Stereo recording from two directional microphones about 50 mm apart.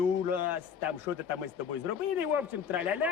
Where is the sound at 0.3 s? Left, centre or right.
Right.